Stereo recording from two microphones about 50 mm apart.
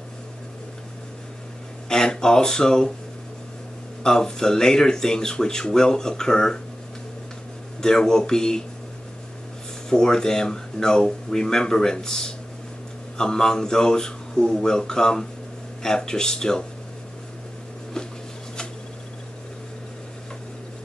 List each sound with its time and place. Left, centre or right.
1.9 s speech: centre
4.0 s speech: centre
7.8 s speech: centre
9.8 s speech: centre
17.9 s a sound: centre